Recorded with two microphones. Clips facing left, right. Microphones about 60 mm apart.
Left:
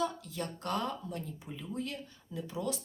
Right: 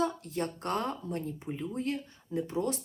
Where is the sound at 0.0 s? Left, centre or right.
Right.